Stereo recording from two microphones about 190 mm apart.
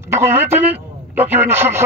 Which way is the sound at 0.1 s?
10° right (ahead or behind).